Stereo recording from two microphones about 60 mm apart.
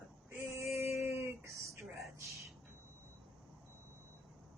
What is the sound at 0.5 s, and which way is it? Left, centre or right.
Female singing, right.